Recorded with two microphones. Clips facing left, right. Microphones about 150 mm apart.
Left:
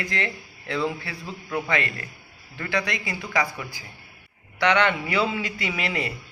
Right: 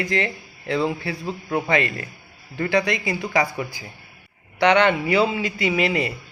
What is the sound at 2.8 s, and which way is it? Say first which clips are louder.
Speech: right 6 dB; 15° right (ahead or behind).